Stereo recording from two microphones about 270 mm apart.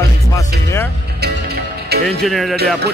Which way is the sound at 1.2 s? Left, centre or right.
Right.